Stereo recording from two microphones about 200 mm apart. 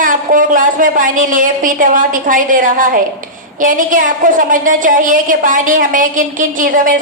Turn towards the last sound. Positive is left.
turn(degrees=-45)  # may be behind; listen again after turning